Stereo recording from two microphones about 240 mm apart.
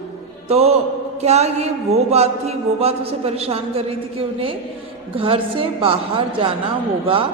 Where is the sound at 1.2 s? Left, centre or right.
Right.